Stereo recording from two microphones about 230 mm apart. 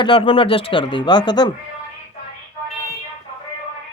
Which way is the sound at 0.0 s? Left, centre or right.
Left.